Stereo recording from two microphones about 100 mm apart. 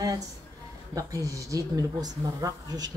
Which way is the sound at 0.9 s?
35° right (ahead or behind).